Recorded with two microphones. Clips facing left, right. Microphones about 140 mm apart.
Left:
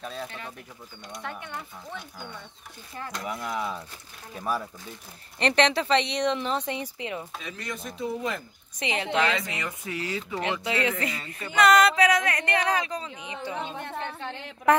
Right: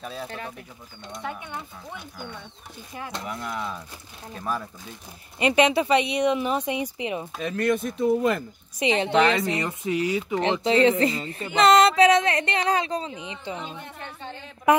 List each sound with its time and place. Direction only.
0.0 s speech: 5° right (ahead or behind)
3.3 s speech: 5° left (ahead or behind)
5.4 s speech: 10° right (ahead or behind)
7.4 s speech: 55° right (ahead or behind)
8.7 s speech: 20° right (ahead or behind)
9.8 s speech: 15° right (ahead or behind)
10.4 s music: 30° right (ahead or behind)
13.7 s a woman's voice: 65° left (ahead or behind)